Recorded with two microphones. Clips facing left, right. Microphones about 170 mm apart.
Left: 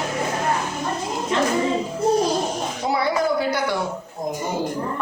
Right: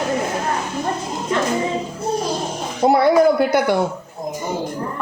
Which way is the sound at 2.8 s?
55° right (ahead or behind).